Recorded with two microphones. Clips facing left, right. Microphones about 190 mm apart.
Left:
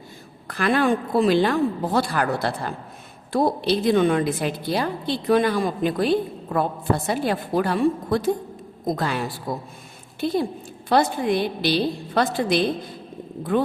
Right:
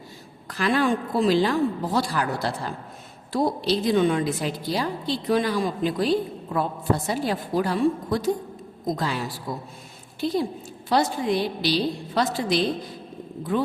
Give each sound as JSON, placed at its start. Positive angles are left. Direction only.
{"t": 0.4, "sound": "a woman's voice", "side_deg": 55}